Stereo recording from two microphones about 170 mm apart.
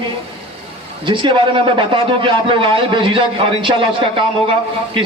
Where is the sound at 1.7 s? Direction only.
30° right (ahead or behind).